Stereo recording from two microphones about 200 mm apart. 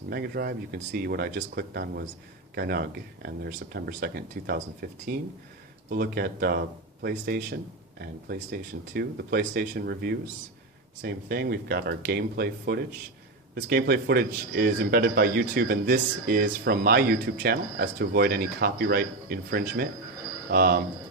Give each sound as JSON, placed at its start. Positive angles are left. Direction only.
{"t": 0.1, "sound": "speech", "side_deg": -50}